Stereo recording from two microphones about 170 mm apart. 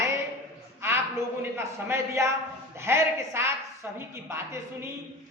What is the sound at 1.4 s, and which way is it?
A man's voice, 15° right (ahead or behind).